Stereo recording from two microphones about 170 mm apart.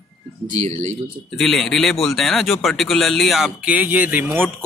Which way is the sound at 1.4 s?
Centre (ahead or behind).